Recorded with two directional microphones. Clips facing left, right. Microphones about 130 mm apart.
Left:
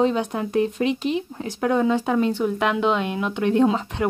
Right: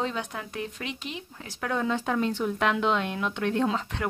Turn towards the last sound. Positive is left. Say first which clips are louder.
# left 7 dB
turn(degrees=15)  # may be behind; listen again after turning